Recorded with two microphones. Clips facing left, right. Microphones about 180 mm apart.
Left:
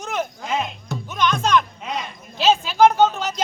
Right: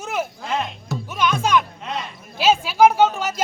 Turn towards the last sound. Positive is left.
turn(degrees=-10)  # may be behind; listen again after turning